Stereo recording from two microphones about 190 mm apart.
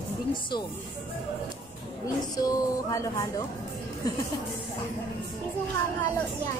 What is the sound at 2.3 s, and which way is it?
Speech, 20° left (ahead or behind).